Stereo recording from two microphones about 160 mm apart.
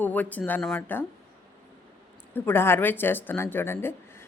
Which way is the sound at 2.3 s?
15° left (ahead or behind).